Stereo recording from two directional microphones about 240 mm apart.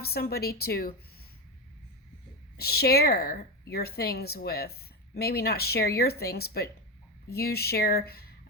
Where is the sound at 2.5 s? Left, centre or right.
Left.